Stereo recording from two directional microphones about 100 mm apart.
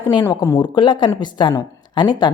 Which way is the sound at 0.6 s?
50° left (ahead or behind).